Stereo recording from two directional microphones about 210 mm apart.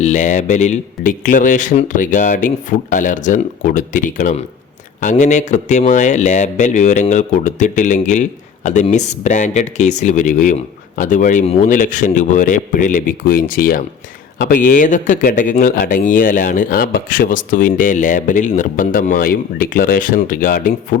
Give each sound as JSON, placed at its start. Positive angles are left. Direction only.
{"t": 0.0, "sound": "speech", "side_deg": 35}